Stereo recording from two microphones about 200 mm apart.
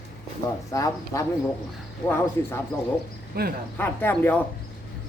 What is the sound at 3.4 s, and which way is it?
Speech, 50° right (ahead or behind).